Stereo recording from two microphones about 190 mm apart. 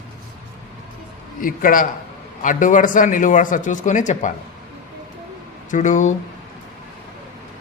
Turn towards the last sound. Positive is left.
turn(degrees=40)  # may be behind; listen again after turning